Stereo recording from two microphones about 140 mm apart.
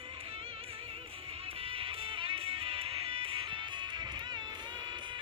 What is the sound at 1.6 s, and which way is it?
Music, 40° right (ahead or behind).